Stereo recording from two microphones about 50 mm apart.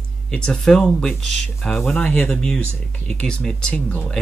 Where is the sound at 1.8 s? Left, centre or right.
Left.